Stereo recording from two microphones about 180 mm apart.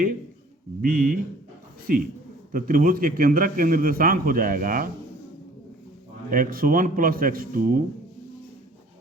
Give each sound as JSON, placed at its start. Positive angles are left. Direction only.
{"t": 0.8, "sound": "a man's voice", "side_deg": -50}
{"t": 6.3, "sound": "a man's voice", "side_deg": -50}